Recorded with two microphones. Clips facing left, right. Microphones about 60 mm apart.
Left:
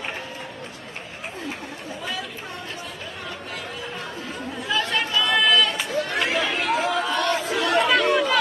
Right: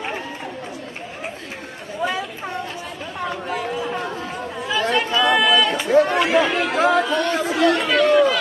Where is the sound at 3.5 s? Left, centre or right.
Centre.